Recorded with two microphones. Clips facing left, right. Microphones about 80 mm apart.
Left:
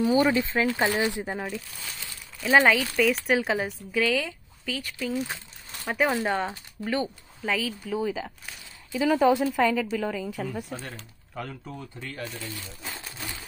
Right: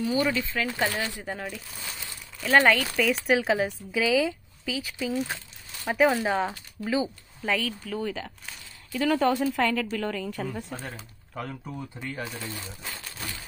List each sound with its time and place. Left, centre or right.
0.1 s speech: left
1.3 s speech: centre
12.8 s a sound: centre